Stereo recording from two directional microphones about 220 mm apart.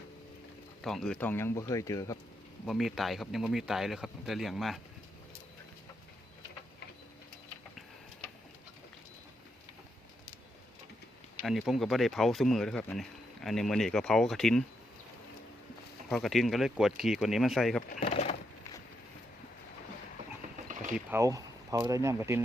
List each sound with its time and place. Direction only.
0.8 s speech: centre (ahead or behind)
2.6 s speech: centre (ahead or behind)
11.4 s speech: centre (ahead or behind)
16.0 s speech: centre (ahead or behind)
18.0 s a sound: 30° left (ahead or behind)
21.1 s speech: 15° right (ahead or behind)